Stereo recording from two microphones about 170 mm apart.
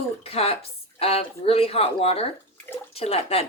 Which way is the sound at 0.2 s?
35° left (ahead or behind).